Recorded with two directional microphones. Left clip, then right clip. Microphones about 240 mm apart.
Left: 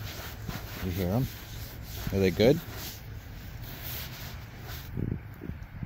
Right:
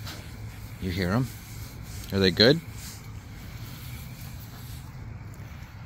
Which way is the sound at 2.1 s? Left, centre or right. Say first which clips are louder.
Right 4 dB; right.